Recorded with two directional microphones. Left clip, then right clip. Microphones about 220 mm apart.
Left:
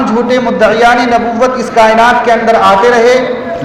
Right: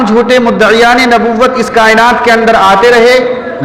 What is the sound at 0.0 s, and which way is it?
A man's voice, 50° right (ahead or behind).